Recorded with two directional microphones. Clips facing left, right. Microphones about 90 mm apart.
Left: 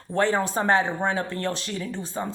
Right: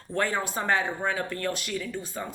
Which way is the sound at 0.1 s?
30° left (ahead or behind).